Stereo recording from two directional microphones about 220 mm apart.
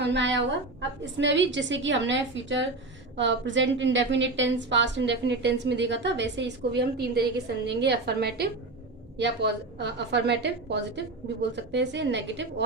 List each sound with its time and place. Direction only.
0.0 s a woman's voice: 55° right (ahead or behind)